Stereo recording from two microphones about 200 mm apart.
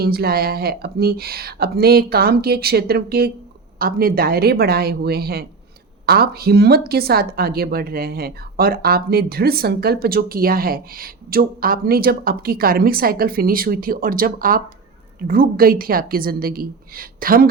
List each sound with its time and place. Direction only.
0.0 s speech: 50° right (ahead or behind)